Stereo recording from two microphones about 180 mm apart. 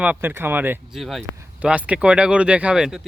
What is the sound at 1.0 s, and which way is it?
Speech, centre (ahead or behind).